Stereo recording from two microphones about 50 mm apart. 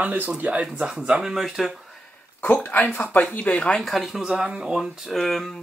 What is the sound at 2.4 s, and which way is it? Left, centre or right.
Speech, left.